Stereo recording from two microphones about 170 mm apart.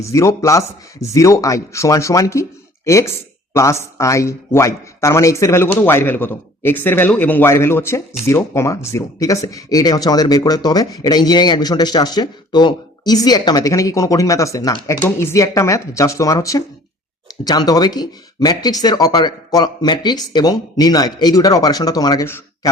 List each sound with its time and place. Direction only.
0.0 s a man's voice: 20° left (ahead or behind)